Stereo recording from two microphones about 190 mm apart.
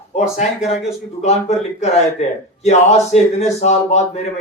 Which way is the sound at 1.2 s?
35° left (ahead or behind).